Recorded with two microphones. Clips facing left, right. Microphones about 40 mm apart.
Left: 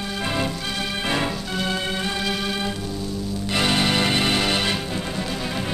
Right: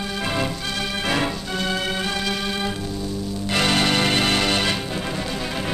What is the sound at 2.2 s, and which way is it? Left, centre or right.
Music, centre.